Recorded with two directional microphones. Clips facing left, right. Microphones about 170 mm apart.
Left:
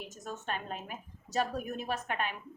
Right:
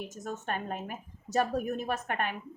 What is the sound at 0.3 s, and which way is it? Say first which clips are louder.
A woman's voice: right 3 dB; 50° right (ahead or behind).